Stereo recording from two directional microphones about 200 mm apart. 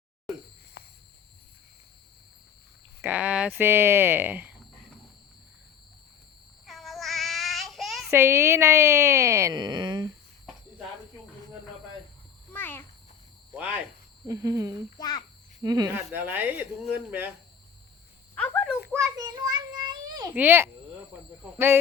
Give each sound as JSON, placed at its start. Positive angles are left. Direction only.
{"t": 0.8, "sound": "cricket", "side_deg": 50}
{"t": 3.0, "sound": "speech", "side_deg": -5}
{"t": 6.7, "sound": "child singing", "side_deg": 0}
{"t": 8.1, "sound": "speech", "side_deg": -10}
{"t": 12.5, "sound": "a sound", "side_deg": 10}
{"t": 13.5, "sound": "speech", "side_deg": -10}
{"t": 14.9, "sound": "a child's voice", "side_deg": 20}
{"t": 15.6, "sound": "speech", "side_deg": -20}
{"t": 18.3, "sound": "a sound", "side_deg": 5}
{"t": 18.9, "sound": "child singing", "side_deg": -20}
{"t": 20.3, "sound": "speech", "side_deg": -10}